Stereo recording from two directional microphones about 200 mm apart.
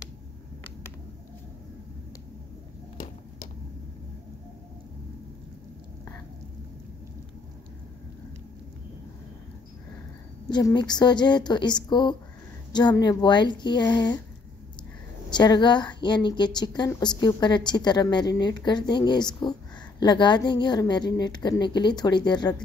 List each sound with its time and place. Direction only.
10.5 s a woman's voice: 20° left (ahead or behind)
15.2 s a woman's voice: 20° left (ahead or behind)